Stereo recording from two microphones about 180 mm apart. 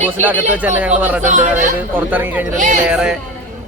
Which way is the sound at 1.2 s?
45° right (ahead or behind).